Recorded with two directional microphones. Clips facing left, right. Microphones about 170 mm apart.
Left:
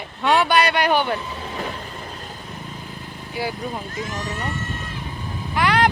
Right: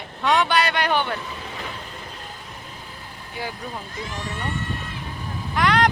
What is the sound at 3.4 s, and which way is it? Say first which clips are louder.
Speech: left 5 dB; 10° left (ahead or behind).